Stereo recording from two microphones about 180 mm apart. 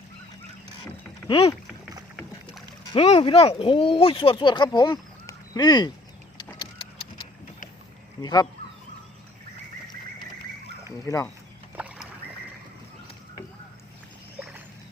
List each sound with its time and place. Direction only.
1.3 s speech: 30° left (ahead or behind)
2.9 s speech: 30° left (ahead or behind)
8.2 s speech: 20° left (ahead or behind)
11.0 s speech: 20° left (ahead or behind)
11.8 s rowboat: 5° right (ahead or behind)
14.3 s a sound: 5° right (ahead or behind)